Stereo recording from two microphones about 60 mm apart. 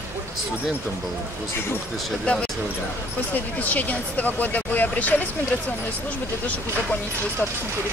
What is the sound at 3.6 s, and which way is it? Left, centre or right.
Speech, left.